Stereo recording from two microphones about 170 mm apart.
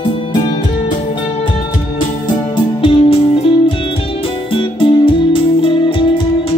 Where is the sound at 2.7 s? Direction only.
30° left (ahead or behind).